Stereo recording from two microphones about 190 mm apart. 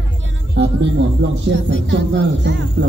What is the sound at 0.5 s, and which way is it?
Speech, 70° right (ahead or behind).